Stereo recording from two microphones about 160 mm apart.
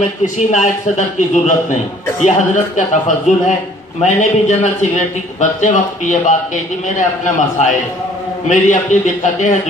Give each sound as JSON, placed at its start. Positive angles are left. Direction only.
{"t": 0.2, "sound": "a man's voice", "side_deg": 50}